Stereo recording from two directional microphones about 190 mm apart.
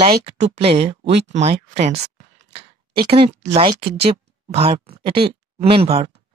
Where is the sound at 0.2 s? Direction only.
30° right (ahead or behind).